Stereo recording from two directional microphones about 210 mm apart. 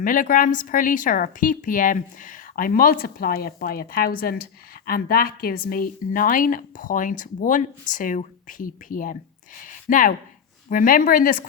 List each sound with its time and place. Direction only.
0.0 s a woman's voice: 40° left (ahead or behind)